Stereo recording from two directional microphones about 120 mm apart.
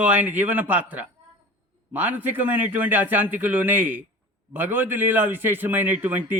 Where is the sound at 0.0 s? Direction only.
10° right (ahead or behind).